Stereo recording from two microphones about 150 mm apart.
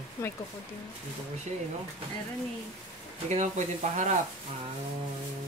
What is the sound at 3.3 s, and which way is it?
Speech, 50° right (ahead or behind).